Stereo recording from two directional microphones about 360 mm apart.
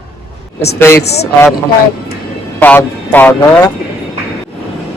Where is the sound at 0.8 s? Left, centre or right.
Centre.